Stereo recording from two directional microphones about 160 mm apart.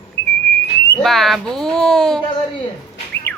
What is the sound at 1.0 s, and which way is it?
A woman's voice, centre (ahead or behind).